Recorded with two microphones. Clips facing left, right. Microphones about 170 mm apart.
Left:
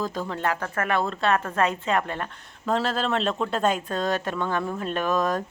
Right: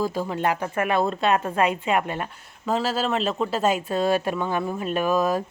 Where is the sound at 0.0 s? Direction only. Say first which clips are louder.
Right 3 dB; 10° right (ahead or behind).